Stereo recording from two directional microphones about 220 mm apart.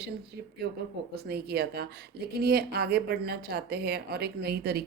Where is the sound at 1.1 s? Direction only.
45° right (ahead or behind).